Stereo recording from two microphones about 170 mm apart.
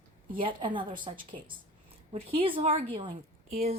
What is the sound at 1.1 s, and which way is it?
Speech, 35° right (ahead or behind).